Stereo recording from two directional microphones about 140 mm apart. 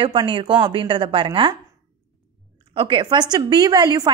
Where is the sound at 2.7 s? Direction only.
35° right (ahead or behind).